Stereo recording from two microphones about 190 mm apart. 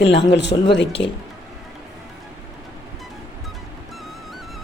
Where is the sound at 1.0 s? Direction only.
55° left (ahead or behind).